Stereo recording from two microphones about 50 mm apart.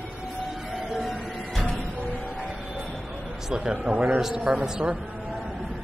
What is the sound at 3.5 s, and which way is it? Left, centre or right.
Speech, centre.